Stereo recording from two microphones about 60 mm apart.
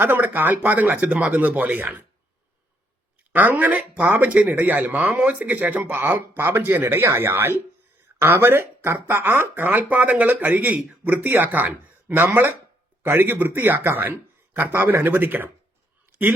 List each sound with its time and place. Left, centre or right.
0.0 s speech: right
3.3 s speech: right